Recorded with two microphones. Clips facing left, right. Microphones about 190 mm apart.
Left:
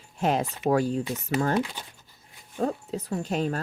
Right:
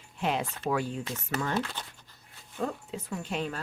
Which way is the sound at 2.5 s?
40° left (ahead or behind).